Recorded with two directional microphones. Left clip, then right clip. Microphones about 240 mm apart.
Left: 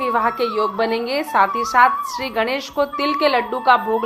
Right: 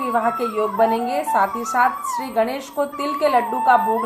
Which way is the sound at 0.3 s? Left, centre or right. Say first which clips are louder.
Even; left.